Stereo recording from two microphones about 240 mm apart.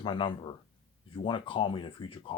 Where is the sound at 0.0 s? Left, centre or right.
Centre.